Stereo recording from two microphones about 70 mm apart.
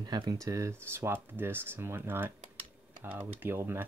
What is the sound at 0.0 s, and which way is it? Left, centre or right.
Speech, right.